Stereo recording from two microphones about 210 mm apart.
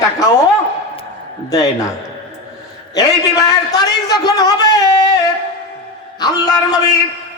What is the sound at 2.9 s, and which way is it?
A man's voice, 15° left (ahead or behind).